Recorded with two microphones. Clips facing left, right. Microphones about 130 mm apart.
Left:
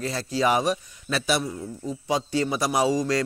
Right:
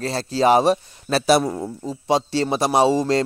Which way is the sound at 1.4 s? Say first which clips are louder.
Right 7 dB; 70° right (ahead or behind).